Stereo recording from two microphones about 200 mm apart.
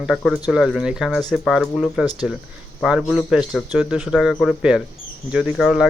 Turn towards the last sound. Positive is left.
turn(degrees=-5)  # may be behind; listen again after turning